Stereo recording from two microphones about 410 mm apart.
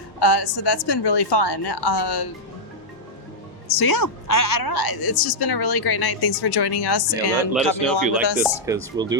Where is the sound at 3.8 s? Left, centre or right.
Left.